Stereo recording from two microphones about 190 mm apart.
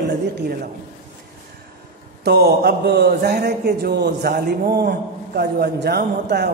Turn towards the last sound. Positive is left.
turn(degrees=-60)  # may be behind; listen again after turning